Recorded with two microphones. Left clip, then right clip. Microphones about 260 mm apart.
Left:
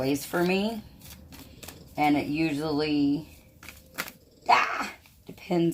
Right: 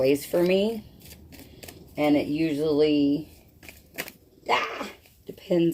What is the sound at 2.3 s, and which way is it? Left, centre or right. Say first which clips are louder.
Speech: right 5 dB; left.